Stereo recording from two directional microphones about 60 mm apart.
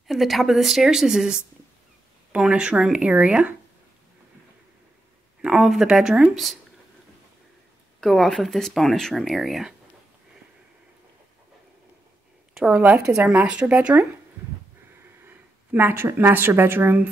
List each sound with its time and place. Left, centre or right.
0.1 s speech: centre
5.4 s speech: centre
8.0 s speech: centre
12.7 s speech: right
15.2 s speech: right